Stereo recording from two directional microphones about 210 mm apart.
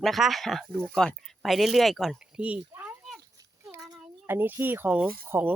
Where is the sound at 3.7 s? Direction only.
10° right (ahead or behind).